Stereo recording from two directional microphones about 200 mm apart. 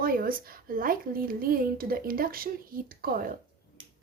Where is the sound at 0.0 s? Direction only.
45° right (ahead or behind).